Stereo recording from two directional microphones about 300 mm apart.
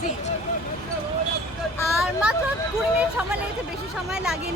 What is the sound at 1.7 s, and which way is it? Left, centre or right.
Vehicle, centre.